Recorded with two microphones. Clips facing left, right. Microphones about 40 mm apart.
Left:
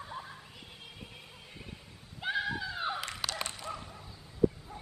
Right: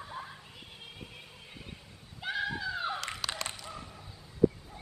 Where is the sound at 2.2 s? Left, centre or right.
Centre.